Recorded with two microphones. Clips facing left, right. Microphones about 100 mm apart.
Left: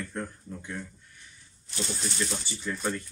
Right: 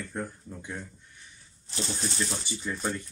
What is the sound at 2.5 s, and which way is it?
Speech, 20° right (ahead or behind).